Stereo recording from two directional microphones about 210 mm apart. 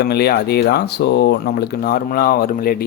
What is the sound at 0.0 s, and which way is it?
A man's voice, 50° left (ahead or behind).